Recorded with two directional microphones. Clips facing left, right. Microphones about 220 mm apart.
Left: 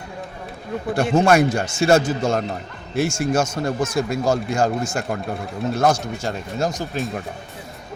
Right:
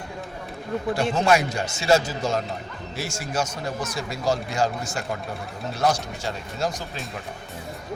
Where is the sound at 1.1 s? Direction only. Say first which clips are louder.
Left 7 dB; 50° left (ahead or behind).